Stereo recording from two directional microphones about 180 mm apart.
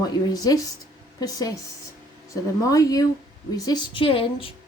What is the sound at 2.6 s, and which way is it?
A woman's voice, 20° left (ahead or behind).